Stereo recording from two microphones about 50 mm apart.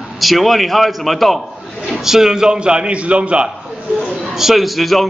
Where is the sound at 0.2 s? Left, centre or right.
Centre; by 3.4 s right.